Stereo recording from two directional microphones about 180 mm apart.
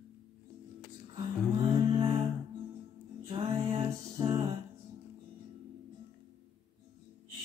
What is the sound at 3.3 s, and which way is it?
Music, 30° right (ahead or behind).